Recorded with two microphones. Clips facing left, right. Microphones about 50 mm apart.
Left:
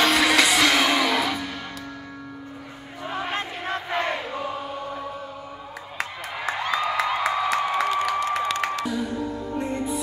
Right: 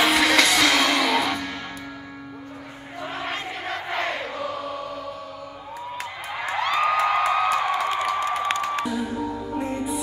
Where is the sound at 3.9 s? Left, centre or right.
Left.